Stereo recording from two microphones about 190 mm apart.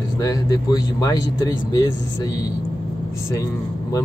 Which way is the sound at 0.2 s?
20° left (ahead or behind).